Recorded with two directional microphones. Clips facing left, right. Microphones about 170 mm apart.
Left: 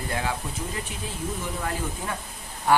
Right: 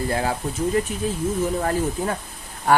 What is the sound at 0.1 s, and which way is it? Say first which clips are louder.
Speech: right 5 dB; 35° right (ahead or behind).